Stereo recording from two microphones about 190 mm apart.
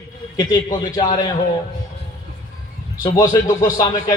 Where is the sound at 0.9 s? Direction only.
20° left (ahead or behind).